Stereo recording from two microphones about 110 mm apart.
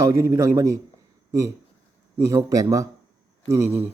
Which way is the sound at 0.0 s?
25° right (ahead or behind).